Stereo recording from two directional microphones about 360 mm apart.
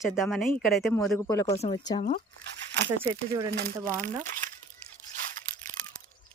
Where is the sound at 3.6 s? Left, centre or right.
Right.